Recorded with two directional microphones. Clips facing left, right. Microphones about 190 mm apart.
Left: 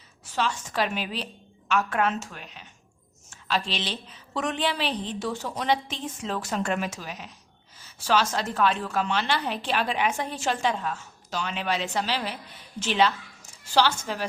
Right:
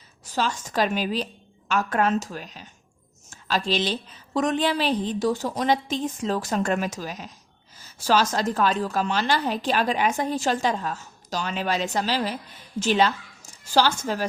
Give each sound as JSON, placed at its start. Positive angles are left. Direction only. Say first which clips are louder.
{"t": 0.3, "sound": "a woman's voice", "louder": "right 2 dB", "side_deg": -40}
{"t": 3.2, "sound": "a sound", "louder": "right 3 dB", "side_deg": -40}
{"t": 4.4, "sound": "a woman's voice", "louder": "right 5 dB", "side_deg": -40}